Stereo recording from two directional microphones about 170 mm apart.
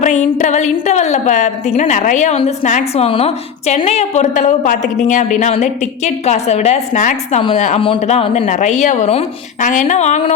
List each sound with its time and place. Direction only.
0.0 s a woman's voice: 45° left (ahead or behind)